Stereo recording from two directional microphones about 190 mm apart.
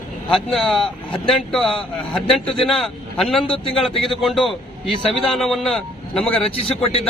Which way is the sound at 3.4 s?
25° left (ahead or behind).